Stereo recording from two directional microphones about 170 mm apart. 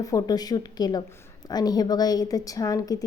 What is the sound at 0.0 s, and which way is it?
A woman's voice, 20° left (ahead or behind).